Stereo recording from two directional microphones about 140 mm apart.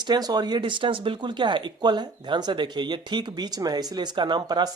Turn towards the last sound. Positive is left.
turn(degrees=-30)  # may be behind; listen again after turning